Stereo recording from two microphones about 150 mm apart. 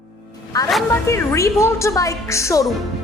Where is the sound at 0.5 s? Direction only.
25° left (ahead or behind).